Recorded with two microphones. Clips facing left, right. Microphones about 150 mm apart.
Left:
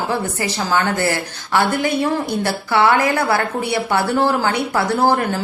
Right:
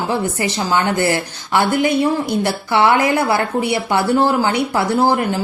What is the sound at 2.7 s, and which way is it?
Speech, 20° right (ahead or behind).